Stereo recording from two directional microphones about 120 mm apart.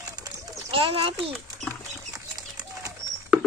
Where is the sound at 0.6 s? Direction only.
50° right (ahead or behind).